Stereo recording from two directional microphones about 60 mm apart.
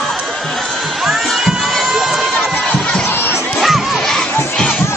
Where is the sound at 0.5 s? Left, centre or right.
Centre.